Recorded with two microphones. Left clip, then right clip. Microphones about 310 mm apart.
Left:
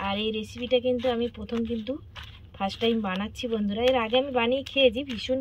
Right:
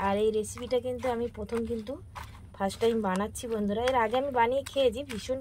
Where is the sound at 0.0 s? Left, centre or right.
Right.